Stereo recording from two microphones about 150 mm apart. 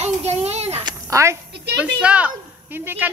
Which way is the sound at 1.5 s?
90° right.